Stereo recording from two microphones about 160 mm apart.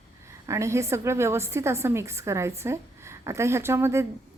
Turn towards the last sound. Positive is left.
turn(degrees=-15)  # may be behind; listen again after turning